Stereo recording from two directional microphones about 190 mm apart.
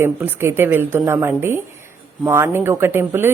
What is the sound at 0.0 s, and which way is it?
Speech, 10° right (ahead or behind).